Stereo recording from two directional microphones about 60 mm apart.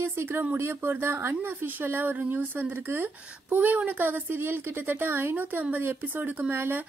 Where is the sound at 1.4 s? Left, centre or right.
Right.